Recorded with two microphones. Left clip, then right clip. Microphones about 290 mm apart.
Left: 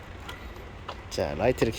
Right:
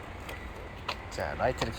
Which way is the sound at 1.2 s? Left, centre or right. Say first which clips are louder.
Left 6 dB; left.